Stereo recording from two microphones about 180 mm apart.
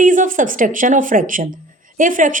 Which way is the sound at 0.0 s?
45° right (ahead or behind).